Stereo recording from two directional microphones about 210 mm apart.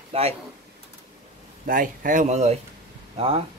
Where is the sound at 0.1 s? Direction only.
30° right (ahead or behind).